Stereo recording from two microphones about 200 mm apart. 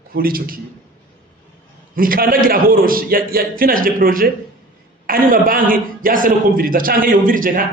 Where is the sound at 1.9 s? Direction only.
45° right (ahead or behind).